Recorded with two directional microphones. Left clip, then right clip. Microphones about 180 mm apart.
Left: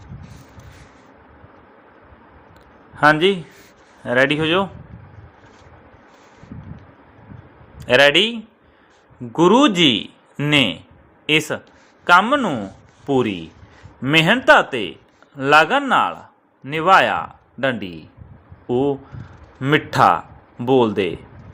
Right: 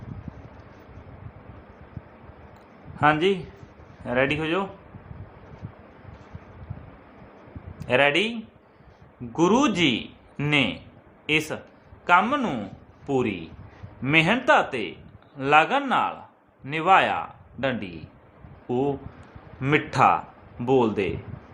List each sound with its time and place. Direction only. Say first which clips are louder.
3.0 s a man's voice: left 6 dB; 20° left (ahead or behind)
7.9 s a man's voice: left 8 dB; 25° left (ahead or behind)
9.3 s a man's voice: left 7 dB; 25° left (ahead or behind)